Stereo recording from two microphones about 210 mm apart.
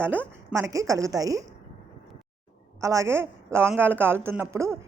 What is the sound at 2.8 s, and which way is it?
Speech, 15° right (ahead or behind).